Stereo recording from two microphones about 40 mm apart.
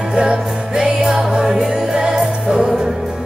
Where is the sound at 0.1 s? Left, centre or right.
Right.